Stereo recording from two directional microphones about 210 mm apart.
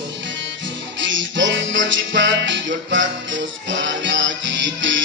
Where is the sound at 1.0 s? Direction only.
60° right (ahead or behind).